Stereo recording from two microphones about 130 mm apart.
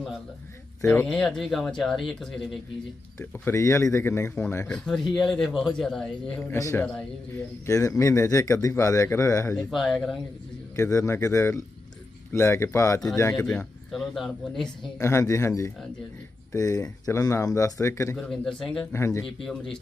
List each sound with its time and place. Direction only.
1.0 s a man's voice: 5° left (ahead or behind)
3.2 s speech: 15° left (ahead or behind)
4.6 s a man's voice: 5° left (ahead or behind)
6.4 s speech: 20° left (ahead or behind)
6.8 s a man's voice: 10° left (ahead or behind)
7.7 s speech: 25° left (ahead or behind)
9.6 s a man's voice: centre (ahead or behind)
10.8 s speech: 25° left (ahead or behind)
13.3 s a man's voice: 5° left (ahead or behind)
14.9 s speech: 20° left (ahead or behind)
18.2 s a man's voice: 5° left (ahead or behind)
18.9 s speech: 20° left (ahead or behind)
19.2 s a man's voice: centre (ahead or behind)